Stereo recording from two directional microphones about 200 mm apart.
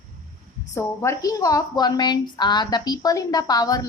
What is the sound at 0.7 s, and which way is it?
A woman's voice, 15° left (ahead or behind).